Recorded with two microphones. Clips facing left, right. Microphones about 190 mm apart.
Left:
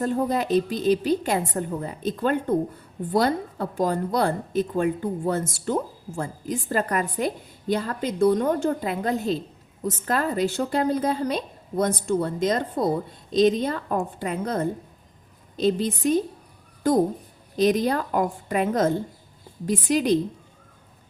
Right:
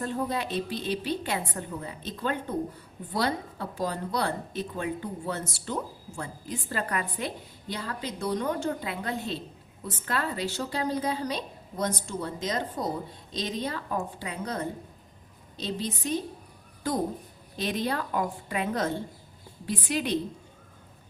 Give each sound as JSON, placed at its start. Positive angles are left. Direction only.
{"t": 0.0, "sound": "speech", "side_deg": 40}
{"t": 17.6, "sound": "speech", "side_deg": 40}